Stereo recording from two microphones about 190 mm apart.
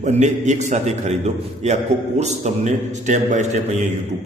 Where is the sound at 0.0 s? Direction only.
40° right (ahead or behind).